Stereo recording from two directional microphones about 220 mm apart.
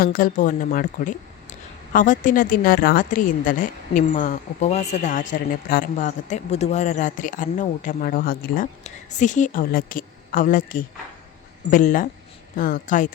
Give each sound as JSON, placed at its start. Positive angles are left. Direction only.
{"t": 0.0, "sound": "a woman's voice", "side_deg": 40}